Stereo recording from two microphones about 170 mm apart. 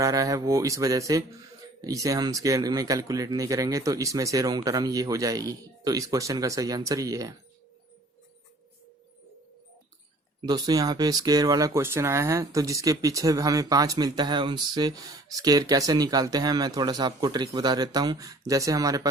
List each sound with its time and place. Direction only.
0.0 s speech: 20° right (ahead or behind)
10.4 s speech: 20° right (ahead or behind)